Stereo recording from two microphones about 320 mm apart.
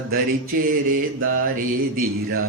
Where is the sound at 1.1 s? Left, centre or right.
Right.